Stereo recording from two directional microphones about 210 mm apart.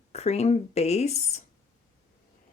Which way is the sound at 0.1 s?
30° left (ahead or behind).